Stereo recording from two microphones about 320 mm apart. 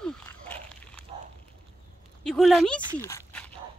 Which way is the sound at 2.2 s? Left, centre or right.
Centre.